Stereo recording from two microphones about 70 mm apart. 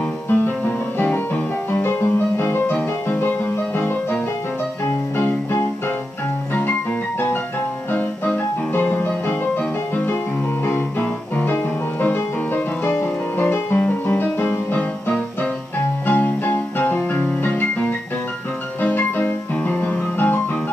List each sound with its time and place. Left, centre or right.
0.3 s music: left
7.9 s music: left
14.8 s music: centre